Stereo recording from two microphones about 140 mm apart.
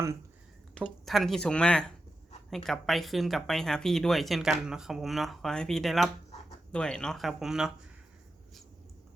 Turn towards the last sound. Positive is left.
turn(degrees=-5)  # may be behind; listen again after turning